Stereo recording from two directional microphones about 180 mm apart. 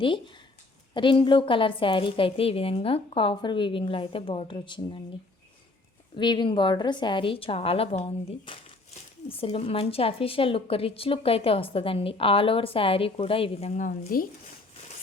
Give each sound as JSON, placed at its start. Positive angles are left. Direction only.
{"t": 0.9, "sound": "a woman's voice", "side_deg": 25}
{"t": 6.1, "sound": "a woman's voice", "side_deg": 25}